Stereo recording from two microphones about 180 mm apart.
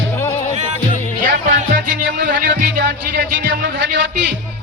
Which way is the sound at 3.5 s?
90° right.